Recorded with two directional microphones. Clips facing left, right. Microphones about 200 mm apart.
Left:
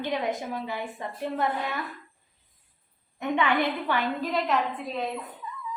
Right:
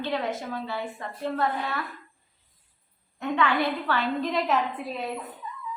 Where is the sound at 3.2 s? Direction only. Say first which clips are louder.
Even; 20° left (ahead or behind).